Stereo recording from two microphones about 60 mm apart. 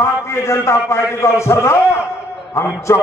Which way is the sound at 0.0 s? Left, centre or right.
Left.